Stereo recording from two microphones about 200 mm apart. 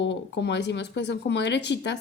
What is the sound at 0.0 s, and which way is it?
A woman's voice, 60° left (ahead or behind).